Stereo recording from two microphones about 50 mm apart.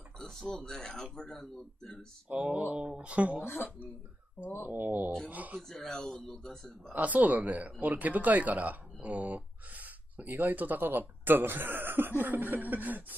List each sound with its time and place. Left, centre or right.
0.4 s speech: centre
2.2 s mantra: right
4.6 s speech: right
5.6 s speech: centre
6.9 s speech: right